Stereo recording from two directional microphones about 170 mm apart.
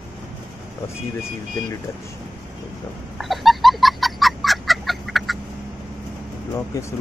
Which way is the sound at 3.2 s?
Centre (ahead or behind).